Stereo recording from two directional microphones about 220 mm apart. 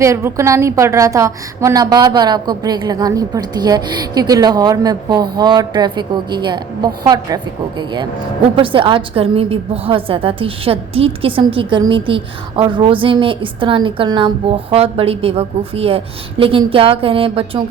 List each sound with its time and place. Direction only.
0.0 s a woman's voice: 15° right (ahead or behind)